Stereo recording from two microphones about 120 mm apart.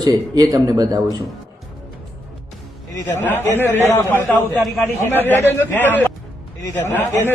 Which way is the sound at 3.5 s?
20° left (ahead or behind).